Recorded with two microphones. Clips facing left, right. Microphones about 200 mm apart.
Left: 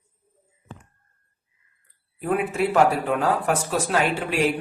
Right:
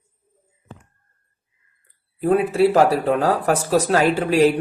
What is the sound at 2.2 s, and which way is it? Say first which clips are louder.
Speech: right 7 dB; 35° right (ahead or behind).